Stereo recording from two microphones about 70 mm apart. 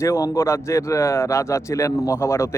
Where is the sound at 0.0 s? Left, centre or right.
Left.